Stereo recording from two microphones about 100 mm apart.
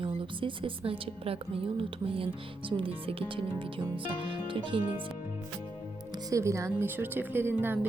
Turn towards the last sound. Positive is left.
turn(degrees=-20)  # may be behind; listen again after turning